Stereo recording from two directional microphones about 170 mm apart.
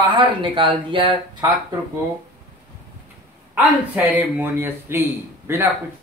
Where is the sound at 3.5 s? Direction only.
10° right (ahead or behind).